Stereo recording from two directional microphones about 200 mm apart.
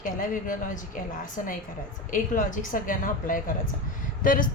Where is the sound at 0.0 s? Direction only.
40° left (ahead or behind).